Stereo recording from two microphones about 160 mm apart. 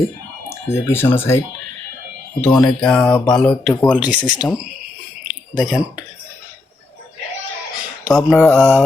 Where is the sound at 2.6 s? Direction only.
5° left (ahead or behind).